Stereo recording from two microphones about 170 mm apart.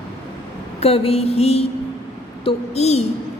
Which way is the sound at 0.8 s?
35° left (ahead or behind).